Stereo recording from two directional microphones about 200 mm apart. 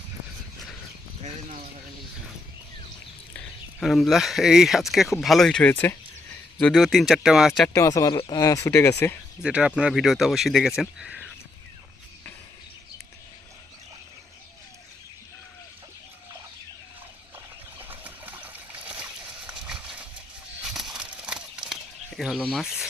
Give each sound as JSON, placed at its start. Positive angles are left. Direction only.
{"t": 3.3, "sound": "speech", "side_deg": 0}
{"t": 7.7, "sound": "speech", "side_deg": 15}
{"t": 9.4, "sound": "speech", "side_deg": -5}
{"t": 17.7, "sound": "water", "side_deg": -10}
{"t": 20.6, "sound": "a sound", "side_deg": 0}
{"t": 22.2, "sound": "speech", "side_deg": 0}